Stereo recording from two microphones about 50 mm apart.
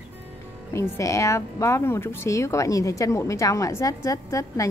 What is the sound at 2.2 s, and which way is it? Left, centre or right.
A woman's voice, left.